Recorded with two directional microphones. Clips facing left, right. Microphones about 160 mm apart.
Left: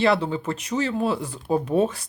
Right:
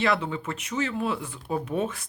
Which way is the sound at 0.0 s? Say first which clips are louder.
Left 5 dB; 30° left (ahead or behind).